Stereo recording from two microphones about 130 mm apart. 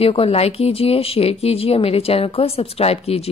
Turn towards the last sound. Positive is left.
turn(degrees=50)  # may be behind; listen again after turning